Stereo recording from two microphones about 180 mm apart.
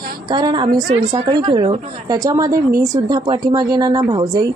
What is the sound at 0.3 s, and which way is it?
Speech, 25° right (ahead or behind).